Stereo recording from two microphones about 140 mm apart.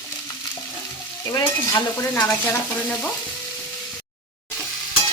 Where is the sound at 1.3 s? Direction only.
20° left (ahead or behind).